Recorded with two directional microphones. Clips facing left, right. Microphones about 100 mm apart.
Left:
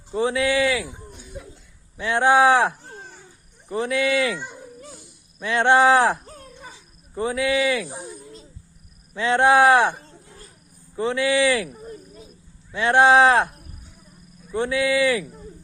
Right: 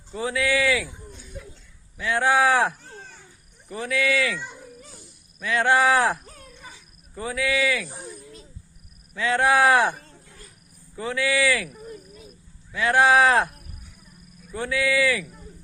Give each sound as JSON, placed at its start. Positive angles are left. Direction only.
{"t": 0.1, "sound": "speech", "side_deg": 25}
{"t": 4.9, "sound": "a sound", "side_deg": 20}
{"t": 7.9, "sound": "speech", "side_deg": 15}
{"t": 9.1, "sound": "speech", "side_deg": 25}